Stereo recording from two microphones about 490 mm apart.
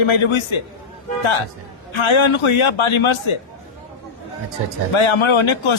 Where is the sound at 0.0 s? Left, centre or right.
Left.